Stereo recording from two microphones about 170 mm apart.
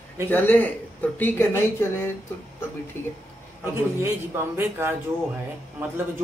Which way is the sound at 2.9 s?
15° left (ahead or behind).